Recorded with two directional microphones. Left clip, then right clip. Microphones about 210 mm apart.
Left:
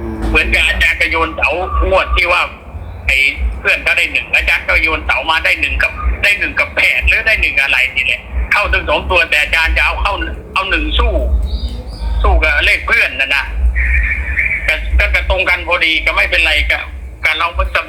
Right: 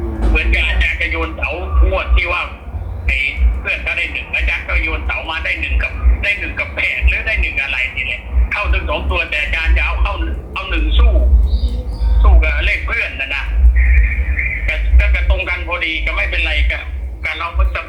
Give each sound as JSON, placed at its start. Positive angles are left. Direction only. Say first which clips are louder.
{"t": 0.3, "sound": "a man's voice", "louder": "left 6 dB", "side_deg": 45}
{"t": 12.2, "sound": "a sound", "louder": "left 7 dB", "side_deg": 45}
{"t": 17.2, "sound": "a man's voice", "louder": "left 7 dB", "side_deg": 45}